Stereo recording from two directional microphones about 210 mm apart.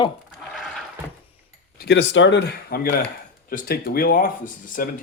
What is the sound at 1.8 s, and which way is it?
Speech, 55° left (ahead or behind).